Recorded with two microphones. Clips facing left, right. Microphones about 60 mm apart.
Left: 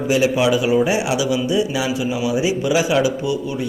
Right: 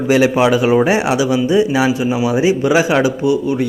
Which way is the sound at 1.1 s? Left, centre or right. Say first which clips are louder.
Right 5 dB; right.